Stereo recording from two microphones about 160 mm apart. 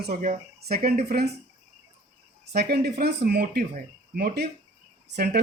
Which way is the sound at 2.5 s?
85° right.